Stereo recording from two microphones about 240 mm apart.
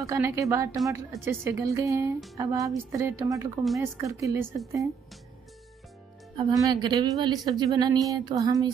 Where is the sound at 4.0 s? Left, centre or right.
Centre.